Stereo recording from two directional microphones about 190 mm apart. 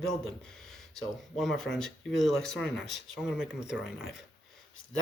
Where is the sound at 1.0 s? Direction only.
Centre (ahead or behind).